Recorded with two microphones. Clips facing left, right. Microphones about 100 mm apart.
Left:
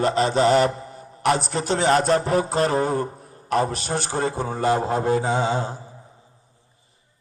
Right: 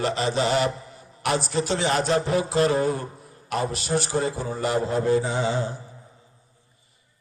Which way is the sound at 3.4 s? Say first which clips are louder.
Left 4 dB; 40° left (ahead or behind).